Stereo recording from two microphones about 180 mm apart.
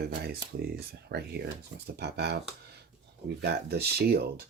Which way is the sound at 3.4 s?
65° right (ahead or behind).